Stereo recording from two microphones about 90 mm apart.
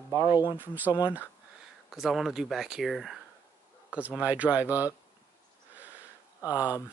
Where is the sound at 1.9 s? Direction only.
Centre (ahead or behind).